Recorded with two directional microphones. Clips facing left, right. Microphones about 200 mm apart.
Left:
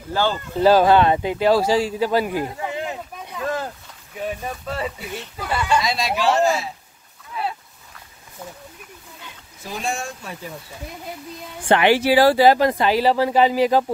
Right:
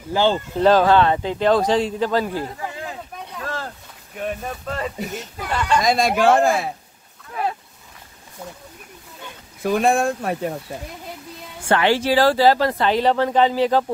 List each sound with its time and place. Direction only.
0.1 s speech: 20° right (ahead or behind)
0.6 s speech: 10° left (ahead or behind); by 3.0 s 25° left (ahead or behind)
3.3 s a sound: 15° left (ahead or behind)
4.2 s speech: centre (ahead or behind)
5.8 s speech: 50° right (ahead or behind)
7.3 s a sound: 50° right (ahead or behind)
9.6 s speech: 60° right (ahead or behind)
11.7 s speech: 15° left (ahead or behind)